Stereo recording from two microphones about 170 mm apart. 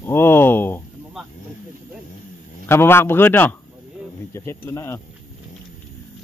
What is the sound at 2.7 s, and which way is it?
A man's voice, 15° left (ahead or behind).